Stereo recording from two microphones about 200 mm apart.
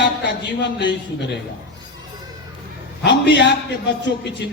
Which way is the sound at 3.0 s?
60° left (ahead or behind).